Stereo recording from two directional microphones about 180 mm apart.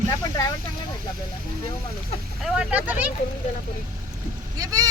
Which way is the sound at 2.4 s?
5° right (ahead or behind).